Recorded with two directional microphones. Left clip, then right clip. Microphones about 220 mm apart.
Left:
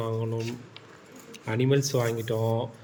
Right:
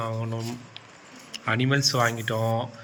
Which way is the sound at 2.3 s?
25° right (ahead or behind).